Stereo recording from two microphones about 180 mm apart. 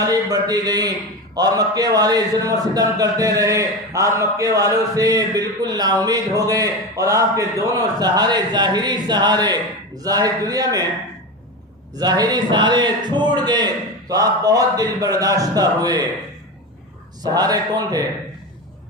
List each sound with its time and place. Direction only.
0.0 s a man's voice: 20° right (ahead or behind)
11.9 s a man's voice: 20° right (ahead or behind)
17.2 s a man's voice: 20° right (ahead or behind)